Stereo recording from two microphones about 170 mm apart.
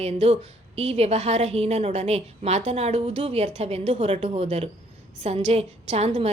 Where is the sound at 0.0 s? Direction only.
35° right (ahead or behind).